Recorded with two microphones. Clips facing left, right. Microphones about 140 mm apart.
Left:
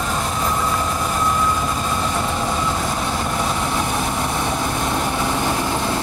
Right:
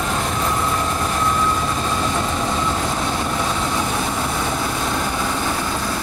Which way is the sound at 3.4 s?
10° left (ahead or behind).